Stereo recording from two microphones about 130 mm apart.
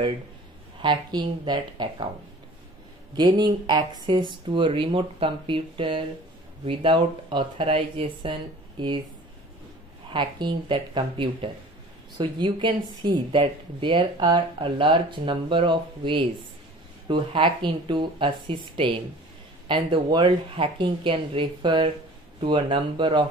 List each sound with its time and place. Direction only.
0.8 s speech: 35° right (ahead or behind)
3.2 s speech: 35° right (ahead or behind)
10.1 s speech: 35° right (ahead or behind)